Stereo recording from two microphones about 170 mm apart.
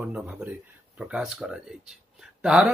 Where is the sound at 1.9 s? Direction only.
5° right (ahead or behind).